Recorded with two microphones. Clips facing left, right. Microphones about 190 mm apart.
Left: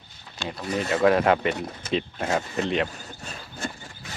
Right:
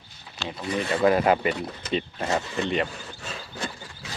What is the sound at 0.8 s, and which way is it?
Speech, centre (ahead or behind).